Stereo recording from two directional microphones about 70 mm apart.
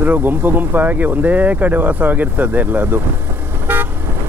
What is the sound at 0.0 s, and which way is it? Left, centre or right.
Speech, right.